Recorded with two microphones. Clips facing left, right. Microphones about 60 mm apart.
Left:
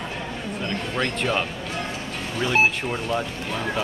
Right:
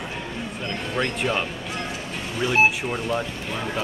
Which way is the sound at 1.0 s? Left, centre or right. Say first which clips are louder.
Even; centre.